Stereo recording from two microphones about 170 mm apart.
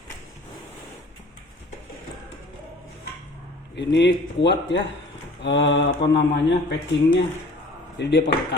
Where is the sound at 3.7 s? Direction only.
90° left.